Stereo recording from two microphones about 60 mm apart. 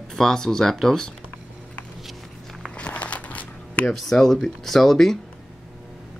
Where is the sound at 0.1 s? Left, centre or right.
Centre.